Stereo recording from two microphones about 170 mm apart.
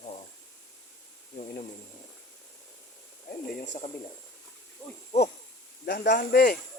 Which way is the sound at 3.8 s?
55° left (ahead or behind).